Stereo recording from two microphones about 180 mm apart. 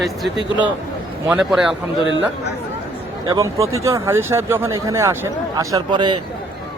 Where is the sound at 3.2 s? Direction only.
20° right (ahead or behind).